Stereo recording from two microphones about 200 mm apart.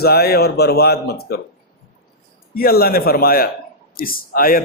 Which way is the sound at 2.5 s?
50° left (ahead or behind).